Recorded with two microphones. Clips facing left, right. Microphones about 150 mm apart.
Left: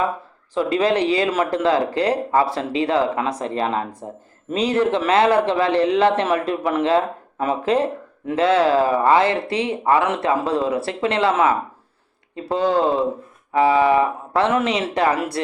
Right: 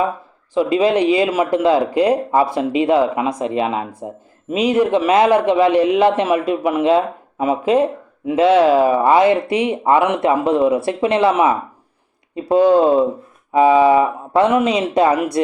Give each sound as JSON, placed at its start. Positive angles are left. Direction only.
{"t": 0.5, "sound": "a man's voice", "side_deg": -15}